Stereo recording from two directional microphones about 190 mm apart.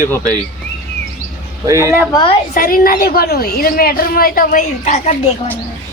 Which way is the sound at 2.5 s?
50° left (ahead or behind).